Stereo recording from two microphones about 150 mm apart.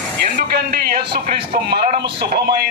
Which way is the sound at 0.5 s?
90° right.